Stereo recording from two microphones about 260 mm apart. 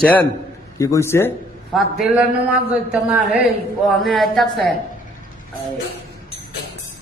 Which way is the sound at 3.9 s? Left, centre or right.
Centre.